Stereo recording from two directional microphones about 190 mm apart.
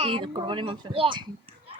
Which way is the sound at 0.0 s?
25° right (ahead or behind).